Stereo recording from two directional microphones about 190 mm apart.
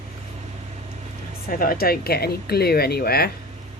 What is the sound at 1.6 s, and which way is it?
Speech, 50° left (ahead or behind).